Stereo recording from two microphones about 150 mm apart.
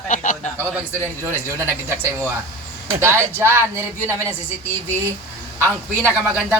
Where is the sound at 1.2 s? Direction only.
15° right (ahead or behind).